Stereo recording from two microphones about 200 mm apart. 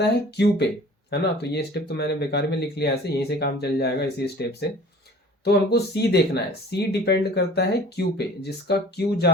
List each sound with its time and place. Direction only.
0.0 s speech: 55° left (ahead or behind)